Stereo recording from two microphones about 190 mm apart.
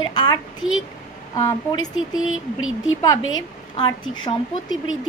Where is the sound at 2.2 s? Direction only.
90° left.